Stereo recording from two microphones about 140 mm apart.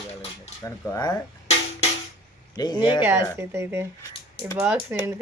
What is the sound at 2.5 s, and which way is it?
Speech, 30° left (ahead or behind).